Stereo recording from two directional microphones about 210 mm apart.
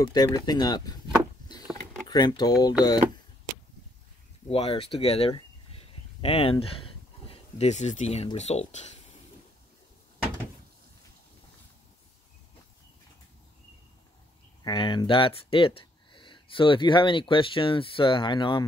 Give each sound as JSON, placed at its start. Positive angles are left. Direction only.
{"t": 0.1, "sound": "speech", "side_deg": 20}
{"t": 1.5, "sound": "vehicle", "side_deg": 20}
{"t": 4.5, "sound": "speech", "side_deg": 25}
{"t": 14.6, "sound": "speech", "side_deg": 20}